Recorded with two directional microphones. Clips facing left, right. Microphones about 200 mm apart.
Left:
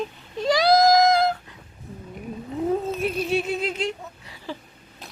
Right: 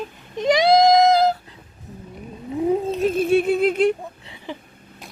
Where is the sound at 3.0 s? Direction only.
50° right (ahead or behind).